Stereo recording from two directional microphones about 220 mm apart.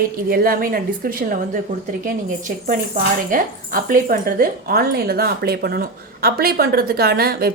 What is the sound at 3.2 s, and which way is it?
Speech, 40° right (ahead or behind).